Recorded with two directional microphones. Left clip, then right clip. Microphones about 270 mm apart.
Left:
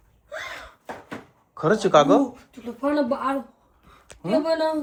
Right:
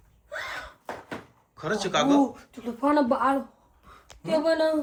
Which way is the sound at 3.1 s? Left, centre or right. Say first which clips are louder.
Right 1 dB; right.